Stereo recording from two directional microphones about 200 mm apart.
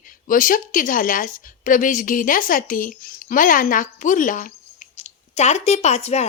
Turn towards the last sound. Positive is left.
turn(degrees=35)  # may be behind; listen again after turning